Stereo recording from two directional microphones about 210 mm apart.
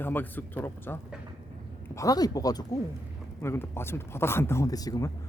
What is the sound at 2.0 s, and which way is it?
Speech, 15° left (ahead or behind).